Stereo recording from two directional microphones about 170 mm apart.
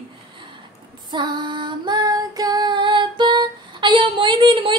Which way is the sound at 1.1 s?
25° right (ahead or behind).